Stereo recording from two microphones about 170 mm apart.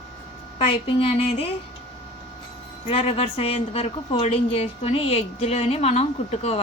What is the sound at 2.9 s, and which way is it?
A woman's voice, 35° left (ahead or behind).